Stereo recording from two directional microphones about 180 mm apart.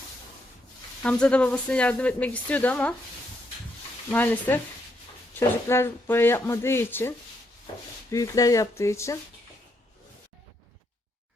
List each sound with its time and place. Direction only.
1.0 s speech: 5° left (ahead or behind)
4.1 s speech: 10° left (ahead or behind)
8.1 s speech: 20° left (ahead or behind)